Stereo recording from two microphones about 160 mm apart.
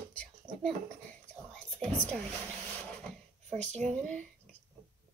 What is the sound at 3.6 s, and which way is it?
Speech, 45° right (ahead or behind).